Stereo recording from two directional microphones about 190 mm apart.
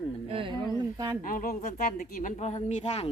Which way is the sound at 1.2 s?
45° left (ahead or behind).